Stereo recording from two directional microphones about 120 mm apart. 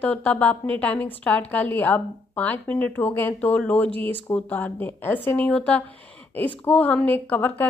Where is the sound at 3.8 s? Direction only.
50° right (ahead or behind).